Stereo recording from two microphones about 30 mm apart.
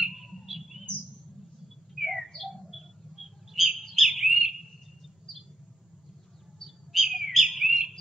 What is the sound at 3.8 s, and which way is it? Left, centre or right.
Bird, centre.